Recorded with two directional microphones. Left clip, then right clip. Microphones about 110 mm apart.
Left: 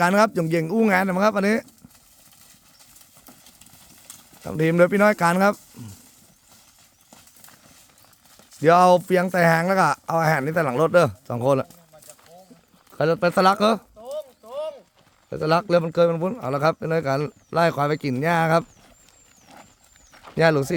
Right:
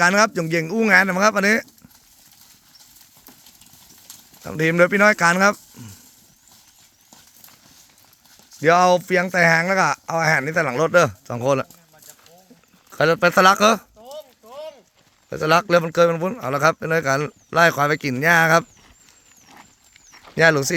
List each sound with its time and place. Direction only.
0.0 s speech: 25° left (ahead or behind)
4.4 s speech: 15° left (ahead or behind)
8.6 s speech: 30° left (ahead or behind)
13.0 s speech: 10° right (ahead or behind)
13.4 s a man's voice: centre (ahead or behind)
15.3 s a man's voice: 5° right (ahead or behind)
20.2 s speech: 5° left (ahead or behind)